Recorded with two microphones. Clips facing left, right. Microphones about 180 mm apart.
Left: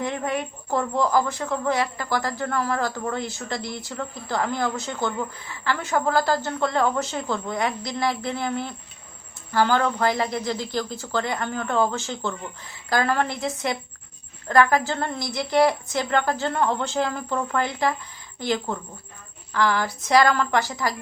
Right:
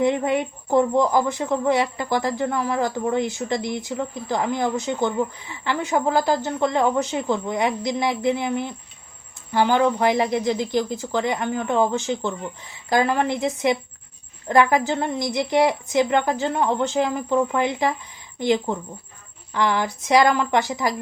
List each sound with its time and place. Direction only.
0.0 s a woman's voice: 20° right (ahead or behind)